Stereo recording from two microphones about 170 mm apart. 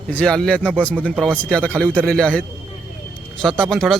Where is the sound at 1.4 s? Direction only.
5° left (ahead or behind).